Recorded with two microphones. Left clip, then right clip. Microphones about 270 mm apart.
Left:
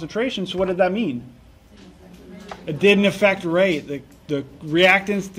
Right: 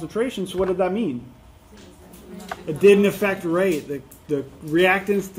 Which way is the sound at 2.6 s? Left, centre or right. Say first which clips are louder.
Right 2 dB; left.